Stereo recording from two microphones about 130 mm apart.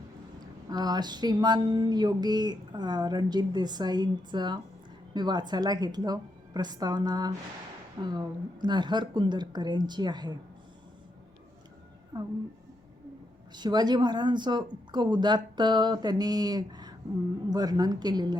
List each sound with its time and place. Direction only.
0.3 s speech: 30° right (ahead or behind)
12.1 s speech: 30° right (ahead or behind)
13.5 s speech: 35° right (ahead or behind)